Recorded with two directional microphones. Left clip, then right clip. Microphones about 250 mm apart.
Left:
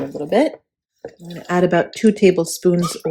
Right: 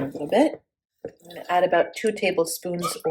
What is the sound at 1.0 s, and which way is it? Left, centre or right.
Speech, centre.